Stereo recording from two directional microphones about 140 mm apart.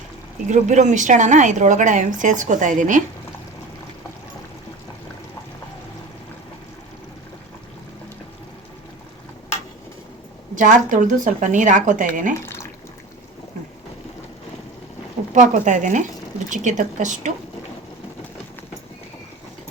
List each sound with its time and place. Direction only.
0.5 s a woman's voice: 60° right (ahead or behind)
10.5 s a woman's voice: 65° right (ahead or behind)
15.4 s a woman's voice: 60° right (ahead or behind)